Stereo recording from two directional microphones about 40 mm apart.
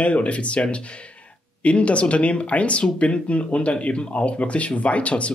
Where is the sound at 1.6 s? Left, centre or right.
Left.